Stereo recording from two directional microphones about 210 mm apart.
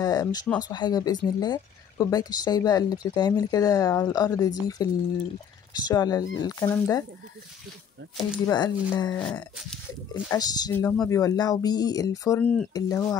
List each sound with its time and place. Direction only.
0.0 s speech: 20° left (ahead or behind)
8.5 s speech: 15° left (ahead or behind)
9.1 s speech: 5° left (ahead or behind)
10.3 s speech: 20° left (ahead or behind)